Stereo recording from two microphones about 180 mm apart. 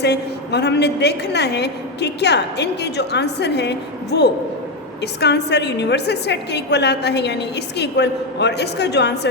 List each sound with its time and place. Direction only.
0.0 s a woman's voice: 70° left (ahead or behind)